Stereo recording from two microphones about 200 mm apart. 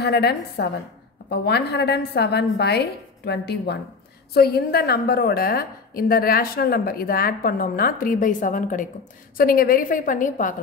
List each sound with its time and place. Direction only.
0.0 s a woman's voice: 55° left (ahead or behind)